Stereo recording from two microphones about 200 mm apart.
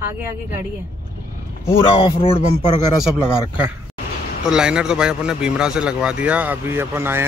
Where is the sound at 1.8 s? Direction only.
25° left (ahead or behind).